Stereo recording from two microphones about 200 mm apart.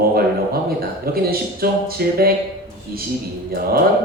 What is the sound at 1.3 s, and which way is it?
Speech, 50° right (ahead or behind).